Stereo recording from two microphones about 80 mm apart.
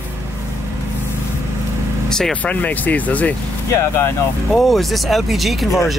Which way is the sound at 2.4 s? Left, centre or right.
Centre.